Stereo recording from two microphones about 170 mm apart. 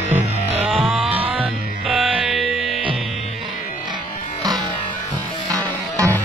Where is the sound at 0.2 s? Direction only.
40° right (ahead or behind).